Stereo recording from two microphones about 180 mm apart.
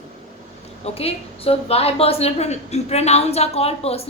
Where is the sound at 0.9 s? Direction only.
35° left (ahead or behind).